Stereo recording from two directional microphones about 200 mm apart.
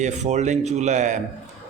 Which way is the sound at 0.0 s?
35° right (ahead or behind).